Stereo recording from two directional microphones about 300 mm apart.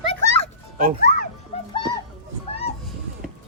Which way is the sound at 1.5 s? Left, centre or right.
Centre.